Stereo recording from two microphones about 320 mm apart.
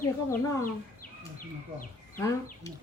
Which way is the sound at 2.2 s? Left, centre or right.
Centre.